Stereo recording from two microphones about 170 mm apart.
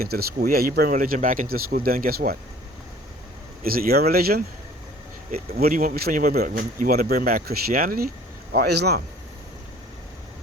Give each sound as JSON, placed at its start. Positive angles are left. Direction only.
{"t": 0.0, "sound": "a man's voice", "side_deg": -65}
{"t": 3.6, "sound": "a man's voice", "side_deg": -60}
{"t": 8.5, "sound": "speech", "side_deg": -75}